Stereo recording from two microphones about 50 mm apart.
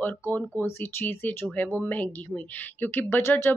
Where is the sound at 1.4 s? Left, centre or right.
Left.